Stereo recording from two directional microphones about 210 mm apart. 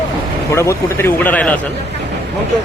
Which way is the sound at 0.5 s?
10° left (ahead or behind).